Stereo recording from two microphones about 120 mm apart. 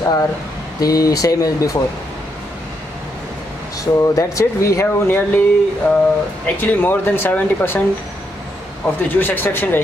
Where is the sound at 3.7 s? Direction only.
30° left (ahead or behind).